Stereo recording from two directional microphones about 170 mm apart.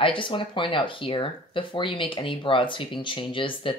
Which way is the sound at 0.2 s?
30° left (ahead or behind).